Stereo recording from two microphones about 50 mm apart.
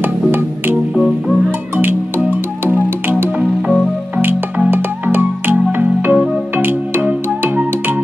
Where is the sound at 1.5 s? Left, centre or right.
Right.